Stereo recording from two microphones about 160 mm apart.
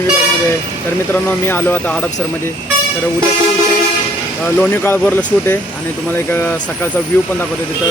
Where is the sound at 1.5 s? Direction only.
10° left (ahead or behind).